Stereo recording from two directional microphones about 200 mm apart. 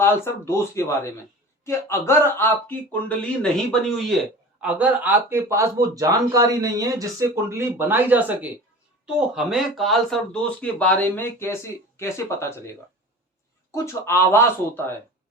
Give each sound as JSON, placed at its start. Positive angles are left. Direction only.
{"t": 0.0, "sound": "speech", "side_deg": 10}